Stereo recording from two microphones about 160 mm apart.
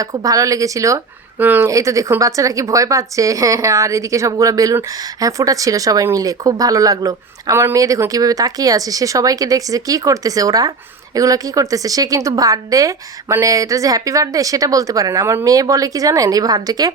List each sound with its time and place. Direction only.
0.0 s a woman's voice: 20° right (ahead or behind)